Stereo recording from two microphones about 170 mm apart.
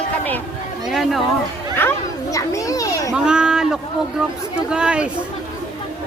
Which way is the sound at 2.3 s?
20° left (ahead or behind).